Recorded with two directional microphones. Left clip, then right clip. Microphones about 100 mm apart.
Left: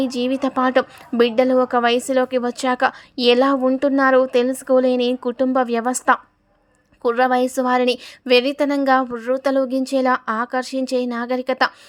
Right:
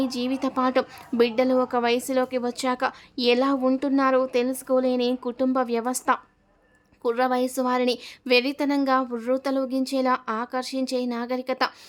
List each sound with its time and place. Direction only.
0.0 s a woman's voice: 30° left (ahead or behind)